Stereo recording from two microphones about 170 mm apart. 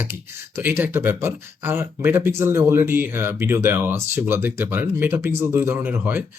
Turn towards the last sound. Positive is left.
turn(degrees=-10)  # may be behind; listen again after turning